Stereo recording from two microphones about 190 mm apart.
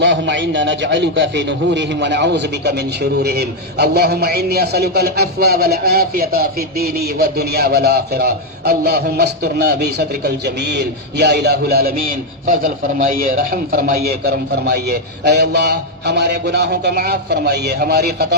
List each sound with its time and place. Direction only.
0.0 s a man's voice: 70° right (ahead or behind); by 11.9 s 55° right (ahead or behind)
13.1 s a man's voice: 45° right (ahead or behind)